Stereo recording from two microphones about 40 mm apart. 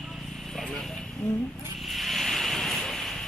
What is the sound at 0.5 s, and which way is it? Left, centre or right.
Vehicle, centre.